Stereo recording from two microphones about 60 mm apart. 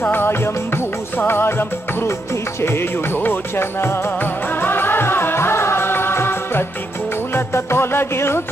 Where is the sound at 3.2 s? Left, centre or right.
Left.